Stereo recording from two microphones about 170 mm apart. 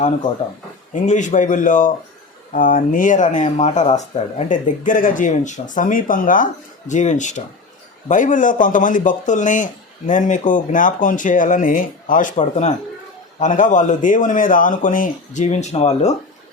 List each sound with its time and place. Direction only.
0.9 s speech: 45° left (ahead or behind)